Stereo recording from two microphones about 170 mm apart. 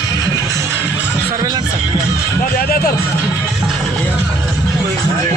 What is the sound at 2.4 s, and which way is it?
Music, 60° left (ahead or behind).